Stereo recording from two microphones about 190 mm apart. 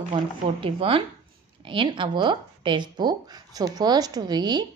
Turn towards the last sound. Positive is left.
turn(degrees=-20)  # may be behind; listen again after turning